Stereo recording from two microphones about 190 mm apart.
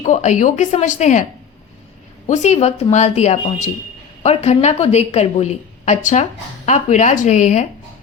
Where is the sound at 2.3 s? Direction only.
40° left (ahead or behind).